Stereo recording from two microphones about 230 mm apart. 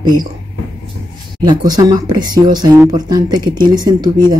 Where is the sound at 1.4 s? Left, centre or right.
Centre.